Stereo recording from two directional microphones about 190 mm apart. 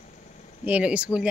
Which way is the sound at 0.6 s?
5° right (ahead or behind).